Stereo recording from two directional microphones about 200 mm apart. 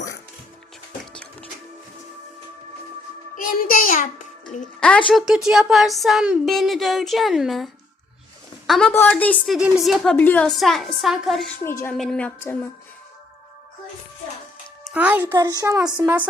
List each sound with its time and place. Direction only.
1.1 s music: 5° left (ahead or behind)
3.3 s a child's voice: 45° left (ahead or behind)
4.8 s a woman's voice: 5° left (ahead or behind)
11.6 s a woman's voice: 10° left (ahead or behind)
14.9 s a child's voice: 5° right (ahead or behind)